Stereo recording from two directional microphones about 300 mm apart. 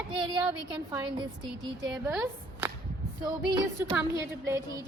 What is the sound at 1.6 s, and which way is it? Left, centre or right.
A woman's voice, centre.